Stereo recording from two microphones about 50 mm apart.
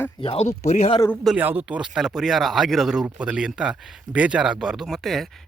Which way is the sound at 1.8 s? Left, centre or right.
Centre.